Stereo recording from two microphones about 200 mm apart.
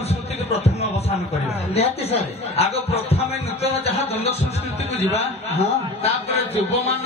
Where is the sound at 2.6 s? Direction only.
30° left (ahead or behind).